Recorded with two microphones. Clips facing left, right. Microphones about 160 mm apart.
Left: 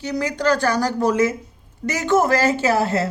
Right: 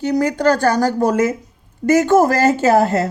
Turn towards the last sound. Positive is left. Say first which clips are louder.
# right 5 dB
turn(degrees=-45)  # may be behind; listen again after turning